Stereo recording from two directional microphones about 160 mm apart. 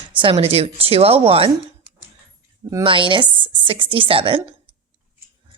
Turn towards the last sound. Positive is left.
turn(degrees=-35)  # may be behind; listen again after turning